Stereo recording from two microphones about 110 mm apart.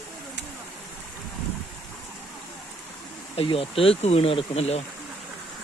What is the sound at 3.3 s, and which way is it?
Speech, 60° left (ahead or behind).